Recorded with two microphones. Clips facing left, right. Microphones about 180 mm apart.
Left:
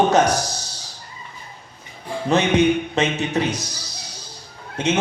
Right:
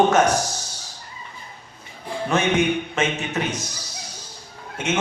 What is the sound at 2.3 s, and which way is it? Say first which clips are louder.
A man's voice: left 4 dB; 35° left (ahead or behind).